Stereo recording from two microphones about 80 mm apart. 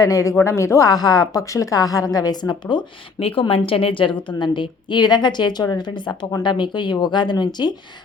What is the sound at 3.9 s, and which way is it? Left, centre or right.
A woman's voice, left.